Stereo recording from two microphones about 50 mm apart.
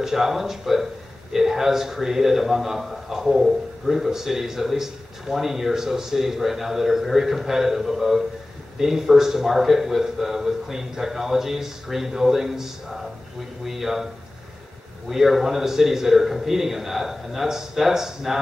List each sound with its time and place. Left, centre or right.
0.0 s a man's voice: centre
15.0 s a man's voice: centre